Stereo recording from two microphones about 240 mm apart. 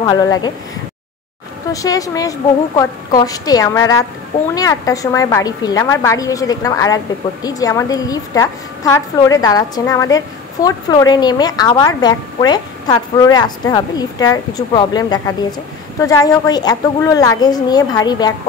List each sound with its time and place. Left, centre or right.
0.0 s a woman's voice: centre
1.7 s a woman's voice: centre